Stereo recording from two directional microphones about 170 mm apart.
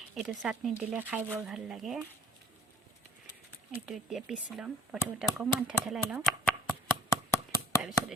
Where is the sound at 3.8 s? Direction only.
5° right (ahead or behind).